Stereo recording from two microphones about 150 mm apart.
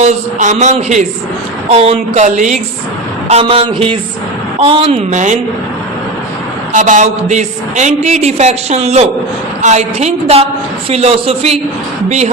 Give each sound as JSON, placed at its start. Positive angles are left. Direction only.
{"t": 0.0, "sound": "a man's voice", "side_deg": -50}
{"t": 1.7, "sound": "a man's voice", "side_deg": -40}
{"t": 6.7, "sound": "a man's voice", "side_deg": -55}